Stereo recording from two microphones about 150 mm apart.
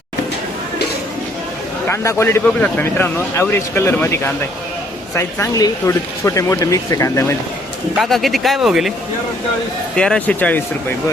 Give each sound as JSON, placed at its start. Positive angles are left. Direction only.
{"t": 1.9, "sound": "speech", "side_deg": 15}
{"t": 7.9, "sound": "speech", "side_deg": 0}
{"t": 9.9, "sound": "speech", "side_deg": 5}